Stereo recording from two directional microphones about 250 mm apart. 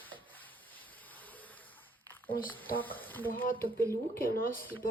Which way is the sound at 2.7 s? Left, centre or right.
Centre.